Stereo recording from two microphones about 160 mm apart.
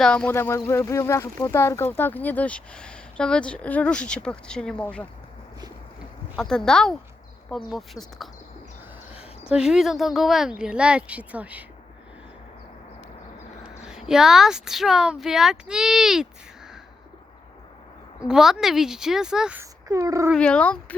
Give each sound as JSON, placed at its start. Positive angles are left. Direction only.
{"t": 0.0, "sound": "speech", "side_deg": 5}
{"t": 6.3, "sound": "speech", "side_deg": 5}
{"t": 9.5, "sound": "speech", "side_deg": -5}
{"t": 13.8, "sound": "speech", "side_deg": -5}
{"t": 18.3, "sound": "speech", "side_deg": -5}
{"t": 19.9, "sound": "speech", "side_deg": -20}
{"t": 20.3, "sound": "speech", "side_deg": 5}